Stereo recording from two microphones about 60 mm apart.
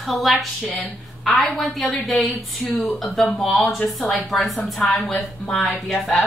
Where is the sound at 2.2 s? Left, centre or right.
Left.